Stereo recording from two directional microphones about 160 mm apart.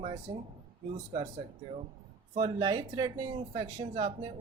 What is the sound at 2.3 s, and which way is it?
Speech, 35° right (ahead or behind).